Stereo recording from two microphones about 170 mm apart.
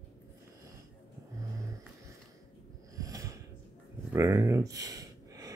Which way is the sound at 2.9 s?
20° right (ahead or behind).